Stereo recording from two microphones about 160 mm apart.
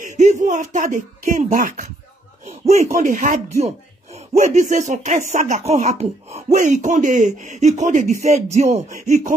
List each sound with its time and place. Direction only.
0.2 s speech: 50° right (ahead or behind)